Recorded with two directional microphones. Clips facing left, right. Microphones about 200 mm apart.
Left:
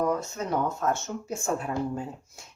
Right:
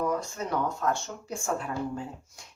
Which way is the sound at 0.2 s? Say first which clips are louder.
Left 2 dB; 25° left (ahead or behind).